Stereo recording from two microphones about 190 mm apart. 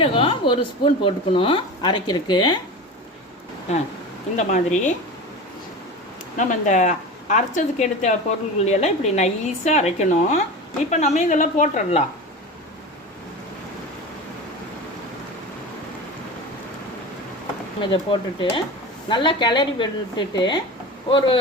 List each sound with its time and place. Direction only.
0.0 s speech: 30° left (ahead or behind)
4.4 s a woman's voice: 40° left (ahead or behind)
6.3 s a woman's voice: 40° left (ahead or behind)
17.7 s speech: 25° left (ahead or behind)